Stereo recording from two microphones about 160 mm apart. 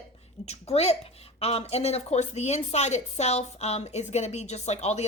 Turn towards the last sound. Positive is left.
turn(degrees=45)  # may be behind; listen again after turning